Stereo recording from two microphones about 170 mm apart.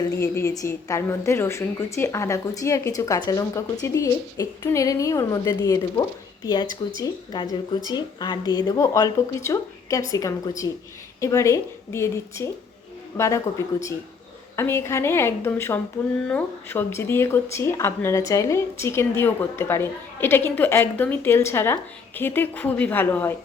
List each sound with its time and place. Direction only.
0.2 s a woman's voice: 20° left (ahead or behind)